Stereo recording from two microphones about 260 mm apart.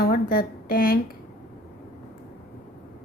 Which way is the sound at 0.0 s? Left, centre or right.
Left.